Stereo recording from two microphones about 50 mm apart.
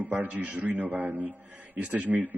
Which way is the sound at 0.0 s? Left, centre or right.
Right.